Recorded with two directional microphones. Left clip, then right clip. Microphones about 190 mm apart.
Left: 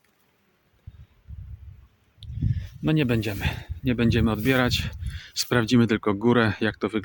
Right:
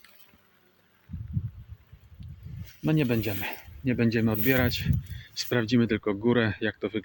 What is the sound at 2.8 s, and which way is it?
Speech, 30° left (ahead or behind).